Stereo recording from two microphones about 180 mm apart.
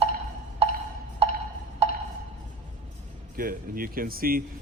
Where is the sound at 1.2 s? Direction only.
35° right (ahead or behind).